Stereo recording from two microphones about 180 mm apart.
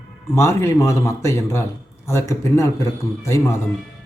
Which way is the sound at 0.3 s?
15° left (ahead or behind).